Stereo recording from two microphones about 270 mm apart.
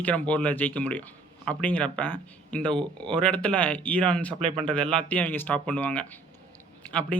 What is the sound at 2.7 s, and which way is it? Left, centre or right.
Speech, centre.